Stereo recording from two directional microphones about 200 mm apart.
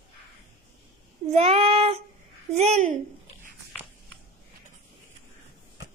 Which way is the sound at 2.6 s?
35° right (ahead or behind).